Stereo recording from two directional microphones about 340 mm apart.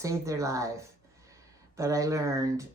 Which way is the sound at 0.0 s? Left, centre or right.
Centre.